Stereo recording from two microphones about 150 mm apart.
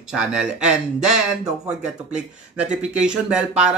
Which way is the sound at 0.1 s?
5° right (ahead or behind).